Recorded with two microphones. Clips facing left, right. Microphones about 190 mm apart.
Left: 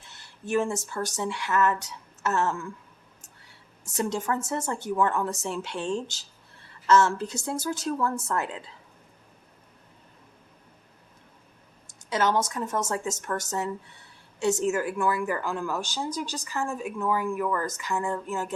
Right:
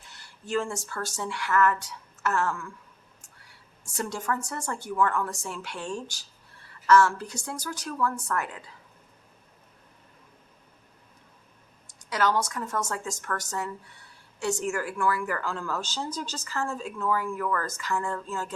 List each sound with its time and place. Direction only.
0.1 s speech: 20° left (ahead or behind)
3.8 s speech: 20° left (ahead or behind)
11.9 s speech: 25° left (ahead or behind)